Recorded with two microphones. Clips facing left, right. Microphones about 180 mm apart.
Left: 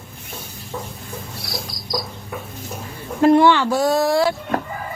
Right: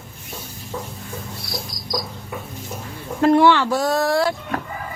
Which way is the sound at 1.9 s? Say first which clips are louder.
Even; centre (ahead or behind).